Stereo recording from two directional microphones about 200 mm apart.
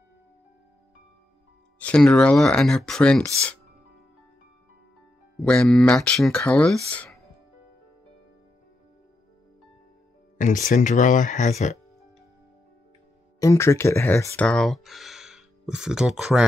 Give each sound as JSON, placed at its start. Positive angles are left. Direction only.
{"t": 1.8, "sound": "speech", "side_deg": 5}
{"t": 5.4, "sound": "speech", "side_deg": 5}
{"t": 6.9, "sound": "music", "side_deg": 5}
{"t": 10.3, "sound": "speech", "side_deg": 40}
{"t": 13.4, "sound": "speech", "side_deg": 15}